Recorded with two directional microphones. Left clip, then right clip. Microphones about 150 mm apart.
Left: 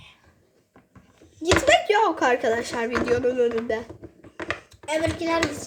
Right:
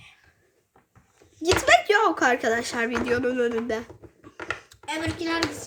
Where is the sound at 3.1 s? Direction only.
40° right (ahead or behind).